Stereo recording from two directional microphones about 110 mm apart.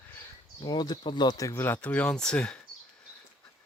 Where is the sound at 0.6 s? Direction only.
40° left (ahead or behind); by 2.6 s 10° left (ahead or behind).